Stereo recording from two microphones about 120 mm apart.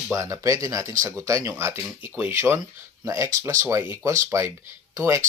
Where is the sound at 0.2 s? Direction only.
30° right (ahead or behind).